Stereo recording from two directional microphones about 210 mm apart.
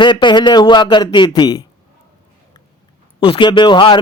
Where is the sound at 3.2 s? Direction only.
25° left (ahead or behind).